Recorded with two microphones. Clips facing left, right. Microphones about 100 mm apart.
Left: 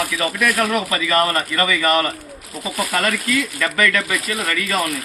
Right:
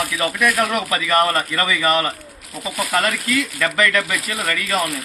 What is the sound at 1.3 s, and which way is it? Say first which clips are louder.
Speech: left 1 dB; 20° right (ahead or behind).